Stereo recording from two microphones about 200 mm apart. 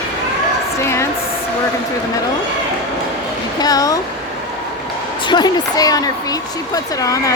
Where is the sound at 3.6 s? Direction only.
20° left (ahead or behind).